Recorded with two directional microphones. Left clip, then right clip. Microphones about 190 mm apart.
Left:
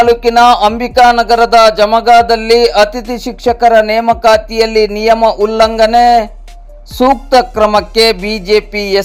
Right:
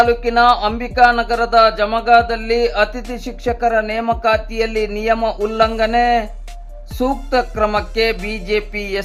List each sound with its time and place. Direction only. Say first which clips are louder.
0.1 s speech: left 6 dB; 30° left (ahead or behind)